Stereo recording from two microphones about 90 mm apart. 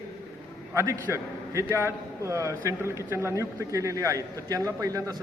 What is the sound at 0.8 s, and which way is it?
A man's voice, 30° right (ahead or behind).